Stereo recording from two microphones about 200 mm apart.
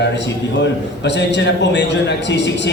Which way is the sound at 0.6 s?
60° left (ahead or behind).